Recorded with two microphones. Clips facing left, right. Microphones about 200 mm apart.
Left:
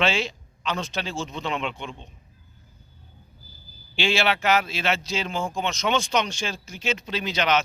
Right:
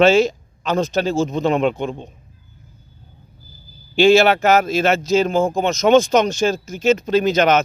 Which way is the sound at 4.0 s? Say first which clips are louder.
Right 12 dB; 45° right (ahead or behind).